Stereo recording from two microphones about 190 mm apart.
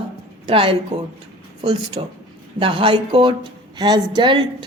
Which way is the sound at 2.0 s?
30° right (ahead or behind).